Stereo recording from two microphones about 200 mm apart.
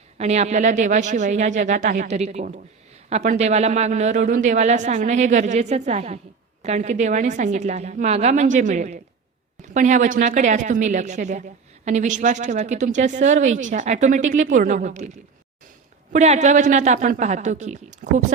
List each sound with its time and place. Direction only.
0.2 s a woman's voice: 35° right (ahead or behind)
16.1 s a woman's voice: 35° right (ahead or behind)